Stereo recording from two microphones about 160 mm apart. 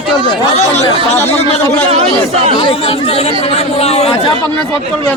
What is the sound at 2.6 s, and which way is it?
Speech, 35° left (ahead or behind).